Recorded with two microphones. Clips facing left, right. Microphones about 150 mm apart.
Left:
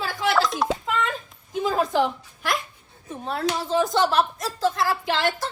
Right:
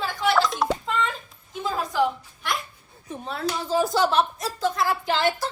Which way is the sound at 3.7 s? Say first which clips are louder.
Even; 5° right (ahead or behind).